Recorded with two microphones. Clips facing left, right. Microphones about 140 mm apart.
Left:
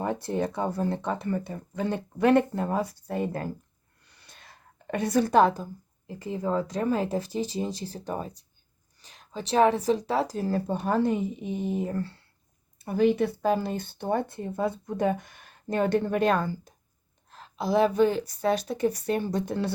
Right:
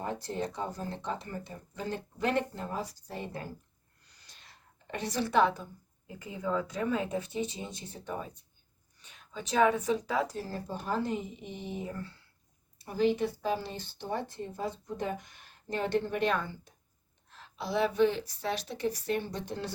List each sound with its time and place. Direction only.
0.0 s speech: 60° left (ahead or behind)
4.1 s a sound: 60° left (ahead or behind)
4.9 s speech: 50° left (ahead or behind); by 8.3 s 35° left (ahead or behind)
9.5 s speech: 30° left (ahead or behind)
10.3 s speech: 60° left (ahead or behind)
11.5 s speech: 45° left (ahead or behind)
12.8 s speech: 60° left (ahead or behind)